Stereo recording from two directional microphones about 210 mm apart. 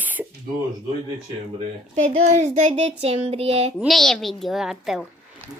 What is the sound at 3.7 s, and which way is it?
A child's voice, centre (ahead or behind).